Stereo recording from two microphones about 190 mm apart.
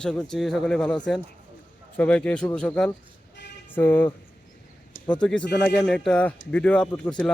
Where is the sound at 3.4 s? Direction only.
65° left (ahead or behind).